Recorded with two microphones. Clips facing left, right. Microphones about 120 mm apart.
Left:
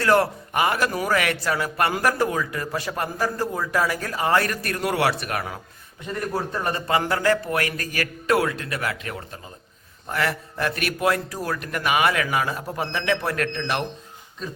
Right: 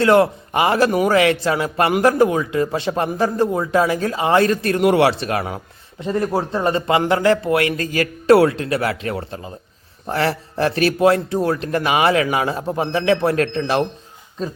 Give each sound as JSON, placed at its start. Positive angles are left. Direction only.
{"t": 0.0, "sound": "a man's voice", "side_deg": -20}